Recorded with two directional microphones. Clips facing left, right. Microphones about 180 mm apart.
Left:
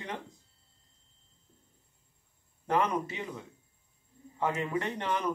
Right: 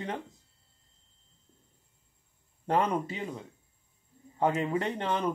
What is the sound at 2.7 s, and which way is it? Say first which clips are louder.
Speech: right 1 dB; 30° right (ahead or behind).